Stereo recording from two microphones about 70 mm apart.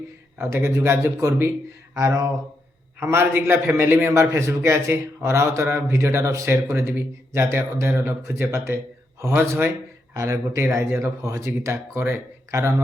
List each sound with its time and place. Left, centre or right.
0.3 s a man's voice: right
10.2 s speech: right